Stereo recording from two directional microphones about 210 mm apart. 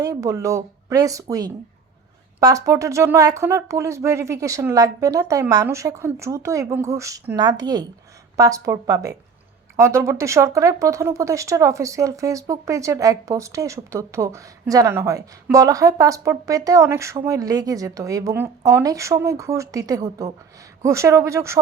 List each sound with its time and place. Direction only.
0.0 s speech: 15° right (ahead or behind)